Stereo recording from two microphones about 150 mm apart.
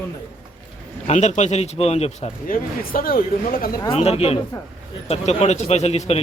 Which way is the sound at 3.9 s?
45° left (ahead or behind).